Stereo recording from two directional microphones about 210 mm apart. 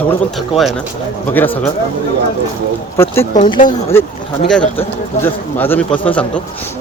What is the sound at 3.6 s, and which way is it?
Speech, 40° left (ahead or behind).